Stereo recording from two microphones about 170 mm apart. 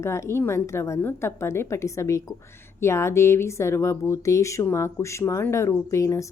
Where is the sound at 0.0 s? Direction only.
15° left (ahead or behind).